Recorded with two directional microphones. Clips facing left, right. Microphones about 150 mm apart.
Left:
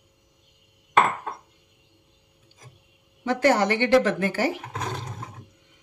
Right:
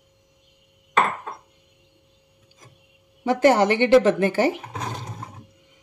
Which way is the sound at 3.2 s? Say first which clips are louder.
Right 4 dB; 20° right (ahead or behind).